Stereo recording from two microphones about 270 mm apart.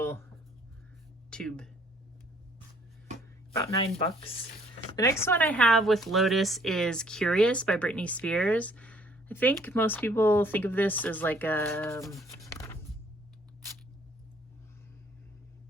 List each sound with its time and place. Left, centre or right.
1.3 s speech: centre
3.8 s speech: centre